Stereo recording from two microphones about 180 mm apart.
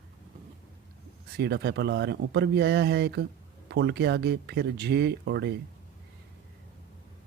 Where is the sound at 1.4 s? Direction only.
65° right (ahead or behind).